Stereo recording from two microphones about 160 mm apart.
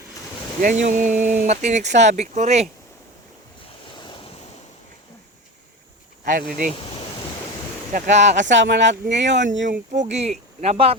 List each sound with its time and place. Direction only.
0.6 s speech: 55° right (ahead or behind)
3.8 s waves: 30° left (ahead or behind)
6.2 s speech: 55° right (ahead or behind)
6.7 s a sound: 35° left (ahead or behind)
7.9 s speech: 50° right (ahead or behind)
8.6 s speech: 90° right
9.9 s speech: 45° right (ahead or behind)